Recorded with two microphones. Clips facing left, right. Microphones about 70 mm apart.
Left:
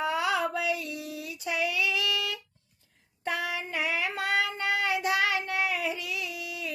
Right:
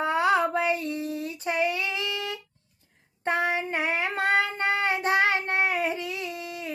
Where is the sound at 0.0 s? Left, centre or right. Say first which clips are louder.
Right 5 dB; right.